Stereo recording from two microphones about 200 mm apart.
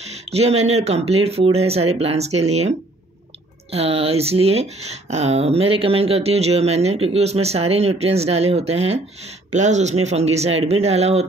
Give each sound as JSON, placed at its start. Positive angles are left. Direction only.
{"t": 0.3, "sound": "speech", "side_deg": -30}
{"t": 3.7, "sound": "speech", "side_deg": -30}